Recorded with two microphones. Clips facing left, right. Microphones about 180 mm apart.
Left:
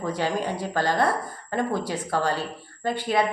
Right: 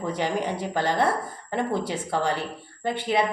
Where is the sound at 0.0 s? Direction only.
15° right (ahead or behind).